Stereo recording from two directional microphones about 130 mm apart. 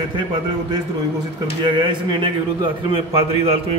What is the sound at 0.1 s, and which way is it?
A man's voice, 35° right (ahead or behind).